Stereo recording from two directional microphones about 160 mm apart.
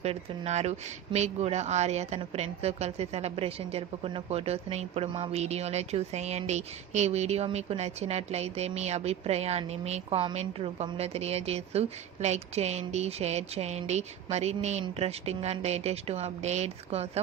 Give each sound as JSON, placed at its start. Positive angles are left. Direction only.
{"t": 0.0, "sound": "speech", "side_deg": -40}